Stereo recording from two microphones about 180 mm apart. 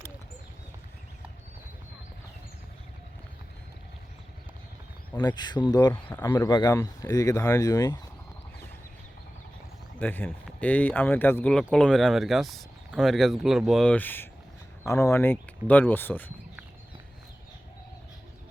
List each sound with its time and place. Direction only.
5.1 s speech: 25° left (ahead or behind)
10.0 s speech: 10° left (ahead or behind)